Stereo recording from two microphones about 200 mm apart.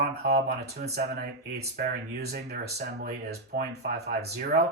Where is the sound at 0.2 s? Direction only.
55° right (ahead or behind).